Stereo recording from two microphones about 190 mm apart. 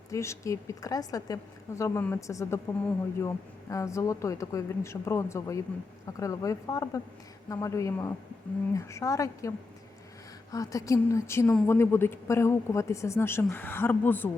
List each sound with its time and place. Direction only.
0.1 s a woman's voice: 15° left (ahead or behind)
10.5 s a woman's voice: 20° left (ahead or behind)